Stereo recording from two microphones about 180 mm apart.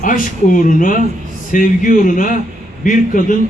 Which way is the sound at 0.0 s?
45° left (ahead or behind).